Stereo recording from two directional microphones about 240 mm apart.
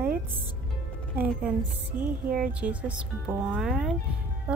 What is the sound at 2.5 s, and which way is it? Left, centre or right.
Speech, centre.